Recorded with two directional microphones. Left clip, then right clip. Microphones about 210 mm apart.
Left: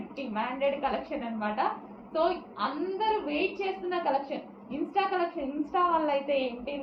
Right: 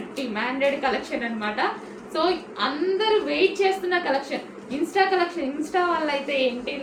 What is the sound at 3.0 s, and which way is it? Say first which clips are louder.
Speech: right 7 dB; 15° right (ahead or behind).